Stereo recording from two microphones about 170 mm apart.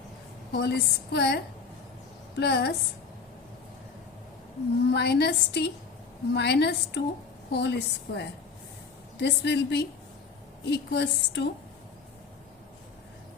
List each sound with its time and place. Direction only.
0.5 s a woman's voice: 75° left (ahead or behind)
4.9 s a woman's voice: 80° left